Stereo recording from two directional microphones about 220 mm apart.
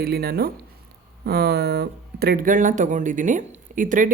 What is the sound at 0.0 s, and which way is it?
Speech, 45° right (ahead or behind).